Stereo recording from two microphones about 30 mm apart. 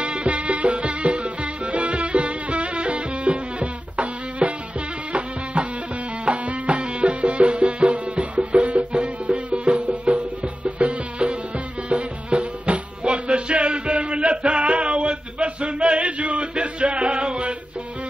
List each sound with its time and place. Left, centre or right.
0.0 s music: right
6.2 s music: right
6.8 s music: right